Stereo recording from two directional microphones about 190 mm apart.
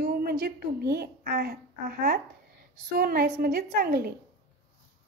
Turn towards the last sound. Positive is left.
turn(degrees=-55)  # may be behind; listen again after turning